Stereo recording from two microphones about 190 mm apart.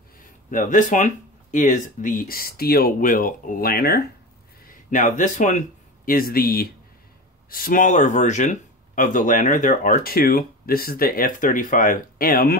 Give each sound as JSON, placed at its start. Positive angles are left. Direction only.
{"t": 0.5, "sound": "speech", "side_deg": 45}
{"t": 4.6, "sound": "speech", "side_deg": 45}